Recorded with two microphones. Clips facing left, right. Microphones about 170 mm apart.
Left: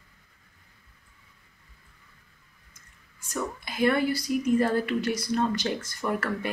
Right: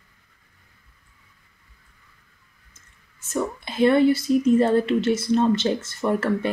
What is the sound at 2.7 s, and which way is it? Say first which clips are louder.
Speech: even; 25° right (ahead or behind).